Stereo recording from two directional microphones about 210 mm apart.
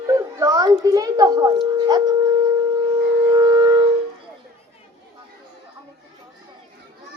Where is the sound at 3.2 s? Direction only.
20° right (ahead or behind).